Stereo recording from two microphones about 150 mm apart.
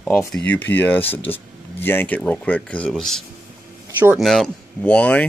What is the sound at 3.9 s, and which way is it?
Speech, 10° right (ahead or behind).